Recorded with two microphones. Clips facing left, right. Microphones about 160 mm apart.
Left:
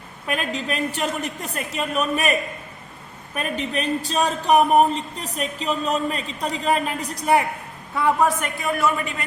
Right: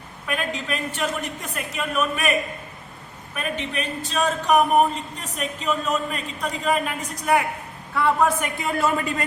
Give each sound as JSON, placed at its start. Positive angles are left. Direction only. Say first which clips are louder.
{"t": 0.3, "sound": "speech", "louder": "left 1 dB", "side_deg": 35}
{"t": 3.3, "sound": "speech", "louder": "left 2 dB", "side_deg": 35}
{"t": 7.9, "sound": "a man's voice", "louder": "left 1 dB", "side_deg": 15}
{"t": 8.6, "sound": "speech", "louder": "left 1 dB", "side_deg": -30}